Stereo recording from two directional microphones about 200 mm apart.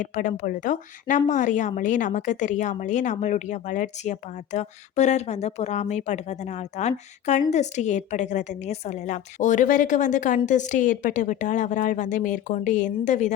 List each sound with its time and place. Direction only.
0.0 s speech: 40° left (ahead or behind)